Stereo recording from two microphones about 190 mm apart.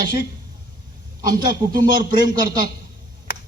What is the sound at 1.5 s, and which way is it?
Speech, 50° right (ahead or behind).